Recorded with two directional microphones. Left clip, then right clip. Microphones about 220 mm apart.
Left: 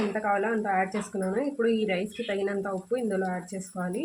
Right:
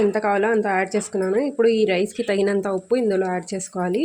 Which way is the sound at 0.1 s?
45° right (ahead or behind).